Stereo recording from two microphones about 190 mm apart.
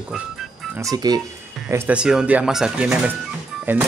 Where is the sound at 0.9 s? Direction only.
20° right (ahead or behind).